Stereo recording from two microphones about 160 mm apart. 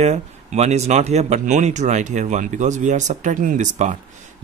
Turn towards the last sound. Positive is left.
turn(degrees=-50)  # may be behind; listen again after turning